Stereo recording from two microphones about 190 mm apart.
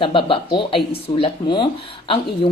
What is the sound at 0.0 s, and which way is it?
A woman's voice, 25° left (ahead or behind).